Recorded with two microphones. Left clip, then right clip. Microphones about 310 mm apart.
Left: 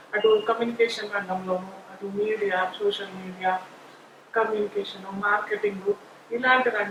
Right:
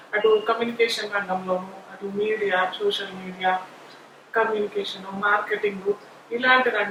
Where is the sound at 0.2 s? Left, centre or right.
Centre.